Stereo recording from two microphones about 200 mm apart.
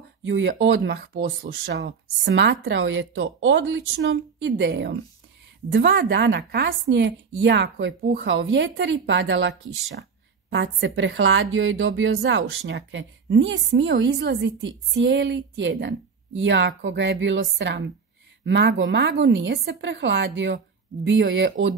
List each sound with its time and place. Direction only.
0.2 s a woman's voice: 65° right (ahead or behind)
1.0 s a woman's voice: 50° right (ahead or behind)